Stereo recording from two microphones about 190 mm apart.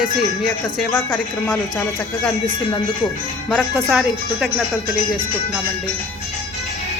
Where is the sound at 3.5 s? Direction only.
Centre (ahead or behind).